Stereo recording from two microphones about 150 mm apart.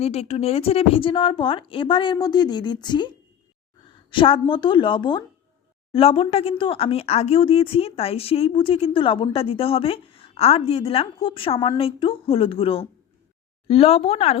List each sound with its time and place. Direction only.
0.0 s speech: 45° left (ahead or behind)
4.1 s speech: 35° left (ahead or behind)